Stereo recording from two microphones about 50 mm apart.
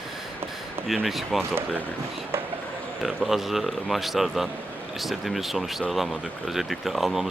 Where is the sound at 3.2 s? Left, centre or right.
Centre.